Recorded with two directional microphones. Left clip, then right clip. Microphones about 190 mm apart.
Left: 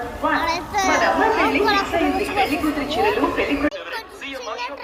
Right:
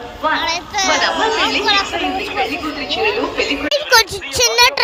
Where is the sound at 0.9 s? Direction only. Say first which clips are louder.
Even; 25° left (ahead or behind).